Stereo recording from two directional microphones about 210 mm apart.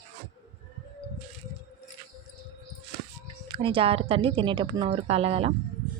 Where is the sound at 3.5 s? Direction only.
25° right (ahead or behind).